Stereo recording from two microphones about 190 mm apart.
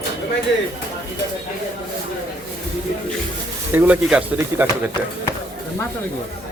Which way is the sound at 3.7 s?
10° right (ahead or behind).